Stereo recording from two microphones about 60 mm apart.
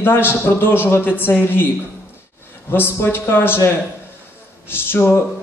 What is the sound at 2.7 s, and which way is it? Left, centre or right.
Speech, left.